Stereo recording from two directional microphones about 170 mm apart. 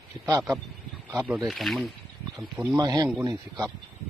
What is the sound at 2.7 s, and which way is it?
Speech, 25° right (ahead or behind).